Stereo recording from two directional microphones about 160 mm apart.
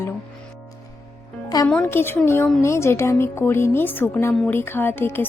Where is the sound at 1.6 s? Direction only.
10° left (ahead or behind).